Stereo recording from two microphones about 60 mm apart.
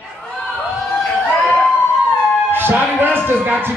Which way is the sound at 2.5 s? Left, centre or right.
Right.